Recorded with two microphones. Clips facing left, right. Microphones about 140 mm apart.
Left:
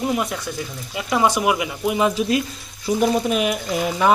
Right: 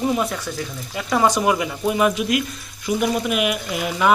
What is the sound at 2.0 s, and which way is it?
Speech, 30° left (ahead or behind).